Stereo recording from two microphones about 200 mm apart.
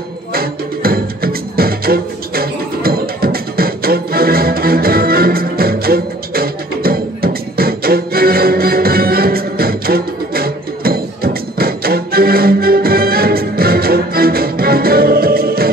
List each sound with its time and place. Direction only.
0.3 s music: 50° right (ahead or behind)